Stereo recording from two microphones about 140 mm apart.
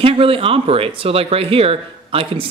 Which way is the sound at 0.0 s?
40° right (ahead or behind).